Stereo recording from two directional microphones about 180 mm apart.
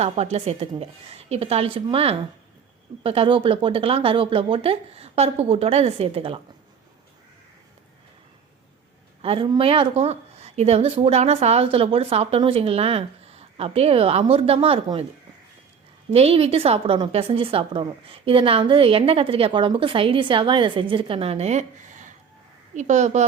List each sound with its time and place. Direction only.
0.0 s a woman's voice: 35° right (ahead or behind)
9.2 s a woman's voice: 30° right (ahead or behind)
16.1 s a woman's voice: 35° right (ahead or behind)